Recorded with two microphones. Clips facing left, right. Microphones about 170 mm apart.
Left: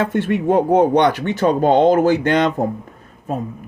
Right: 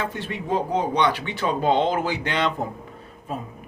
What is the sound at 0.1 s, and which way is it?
Speech, 60° left (ahead or behind).